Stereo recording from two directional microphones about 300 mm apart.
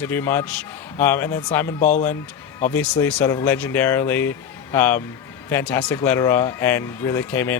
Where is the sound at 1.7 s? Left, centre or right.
Left.